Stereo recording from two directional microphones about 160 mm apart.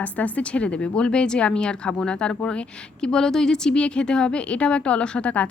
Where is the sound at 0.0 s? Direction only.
10° left (ahead or behind).